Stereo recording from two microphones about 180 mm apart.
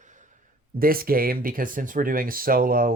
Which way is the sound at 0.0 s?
45° right (ahead or behind).